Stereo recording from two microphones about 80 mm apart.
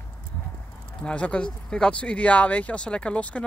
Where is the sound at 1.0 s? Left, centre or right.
Centre.